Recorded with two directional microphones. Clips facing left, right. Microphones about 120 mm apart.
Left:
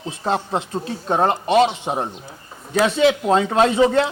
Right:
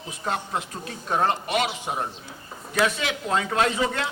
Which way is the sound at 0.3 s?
30° left (ahead or behind).